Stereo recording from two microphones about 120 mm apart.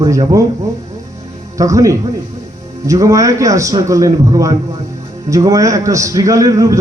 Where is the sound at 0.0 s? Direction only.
30° right (ahead or behind).